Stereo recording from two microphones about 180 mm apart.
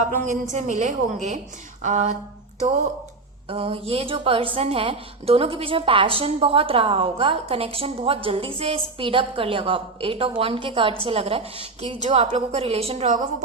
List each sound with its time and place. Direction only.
0.0 s a woman's voice: 45° right (ahead or behind)
3.5 s a woman's voice: 30° right (ahead or behind)